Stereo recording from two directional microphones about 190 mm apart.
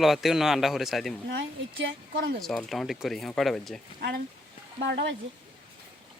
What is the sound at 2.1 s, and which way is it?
Speech, 50° right (ahead or behind).